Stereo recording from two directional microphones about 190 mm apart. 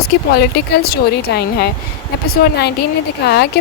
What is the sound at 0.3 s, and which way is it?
Speech, 55° left (ahead or behind).